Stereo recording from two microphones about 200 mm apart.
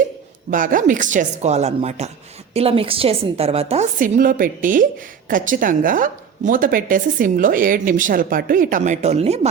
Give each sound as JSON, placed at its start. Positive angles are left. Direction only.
{"t": 0.5, "sound": "a woman's voice", "side_deg": -40}